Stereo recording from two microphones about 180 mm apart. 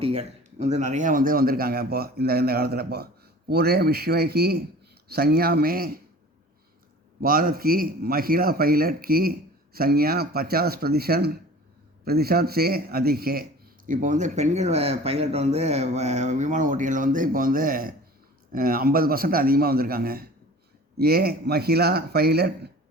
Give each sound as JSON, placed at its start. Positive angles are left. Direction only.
{"t": 0.0, "sound": "a man's voice", "side_deg": -35}
{"t": 7.2, "sound": "a man's voice", "side_deg": -50}